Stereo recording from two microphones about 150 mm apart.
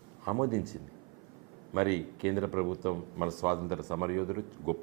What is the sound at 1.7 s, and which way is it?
Speech, 20° right (ahead or behind).